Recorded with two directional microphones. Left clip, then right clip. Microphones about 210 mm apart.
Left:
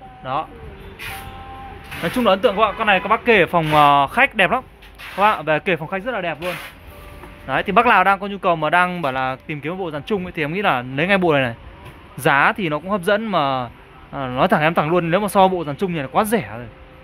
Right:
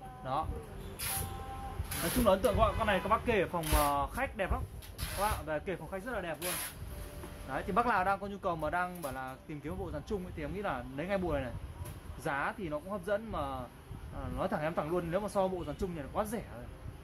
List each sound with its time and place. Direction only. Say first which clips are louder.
0.2 s speech: left 12 dB; 20° left (ahead or behind)
2.2 s speech: left 12 dB; 50° left (ahead or behind)
7.4 s speech: left 16 dB; 40° left (ahead or behind)
9.0 s speech: left 19 dB; 50° left (ahead or behind)